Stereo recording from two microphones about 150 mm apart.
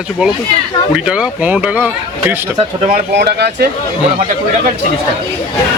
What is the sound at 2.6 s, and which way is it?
Speech, 40° right (ahead or behind).